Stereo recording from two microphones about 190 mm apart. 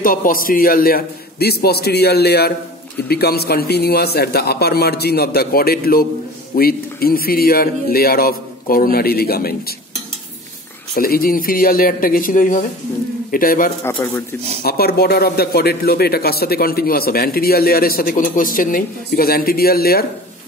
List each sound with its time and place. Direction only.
0.0 s a man's voice: 50° left (ahead or behind)
11.0 s speech: 50° left (ahead or behind)